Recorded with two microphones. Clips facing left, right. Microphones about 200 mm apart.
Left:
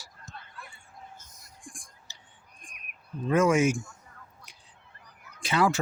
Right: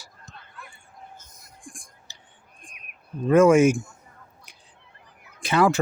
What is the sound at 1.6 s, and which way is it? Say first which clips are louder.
Whispering: right 3 dB; 55° right (ahead or behind).